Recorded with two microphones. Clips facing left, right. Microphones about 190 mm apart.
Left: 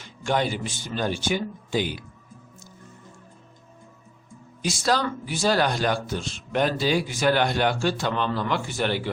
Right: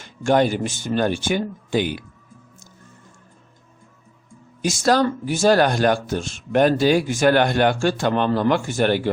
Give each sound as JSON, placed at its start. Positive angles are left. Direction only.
{"t": 0.0, "sound": "speech", "side_deg": -45}
{"t": 4.6, "sound": "speech", "side_deg": -45}